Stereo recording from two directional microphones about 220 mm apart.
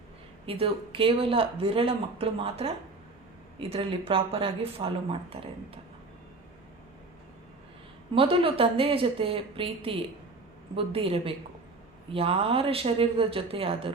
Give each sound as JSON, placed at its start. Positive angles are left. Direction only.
{"t": 0.4, "sound": "speech", "side_deg": -25}
{"t": 8.1, "sound": "speech", "side_deg": -25}